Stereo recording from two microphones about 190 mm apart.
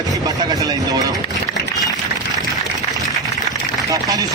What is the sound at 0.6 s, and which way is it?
Speech, 20° right (ahead or behind).